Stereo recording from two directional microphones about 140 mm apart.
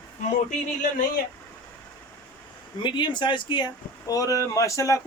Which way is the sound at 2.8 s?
35° left (ahead or behind).